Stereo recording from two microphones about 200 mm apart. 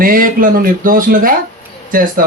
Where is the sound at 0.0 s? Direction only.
45° right (ahead or behind).